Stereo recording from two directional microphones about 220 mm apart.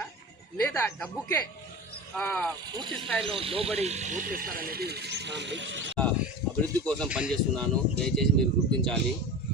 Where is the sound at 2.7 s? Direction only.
20° right (ahead or behind); by 5.9 s 55° right (ahead or behind).